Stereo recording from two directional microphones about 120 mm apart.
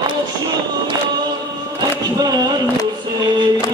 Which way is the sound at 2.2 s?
35° right (ahead or behind).